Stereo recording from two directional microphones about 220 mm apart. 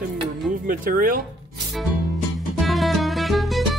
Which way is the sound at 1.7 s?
Centre (ahead or behind).